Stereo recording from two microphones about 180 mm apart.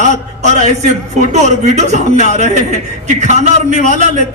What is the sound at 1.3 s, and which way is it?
A man's voice, 40° right (ahead or behind).